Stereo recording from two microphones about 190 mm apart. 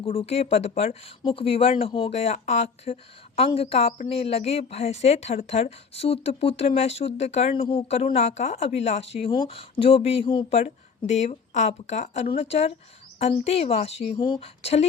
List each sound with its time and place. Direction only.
0.0 s a woman's voice: 30° left (ahead or behind)